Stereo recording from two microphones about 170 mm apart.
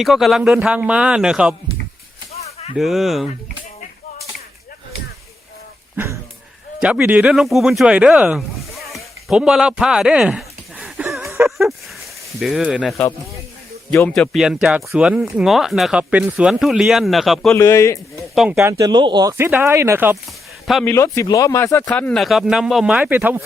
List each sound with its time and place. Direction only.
0.0 s speech: centre (ahead or behind)
2.3 s a sound: 40° left (ahead or behind)
2.7 s speech: centre (ahead or behind)
6.0 s speech: 10° right (ahead or behind)
9.3 s a sound: 5° right (ahead or behind)
11.3 s a sound: 15° right (ahead or behind)
12.4 s speech: centre (ahead or behind)
13.9 s speech: 5° left (ahead or behind)
17.5 s a man's voice: 15° left (ahead or behind)
18.2 s speech: centre (ahead or behind)
18.6 s speech: 20° right (ahead or behind)
20.8 s speech: 15° left (ahead or behind); by 23.4 s 10° right (ahead or behind)